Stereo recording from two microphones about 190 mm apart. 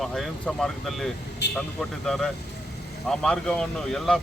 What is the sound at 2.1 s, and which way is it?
Speech, 5° left (ahead or behind).